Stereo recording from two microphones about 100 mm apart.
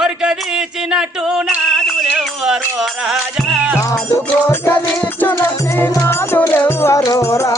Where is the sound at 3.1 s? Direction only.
10° right (ahead or behind).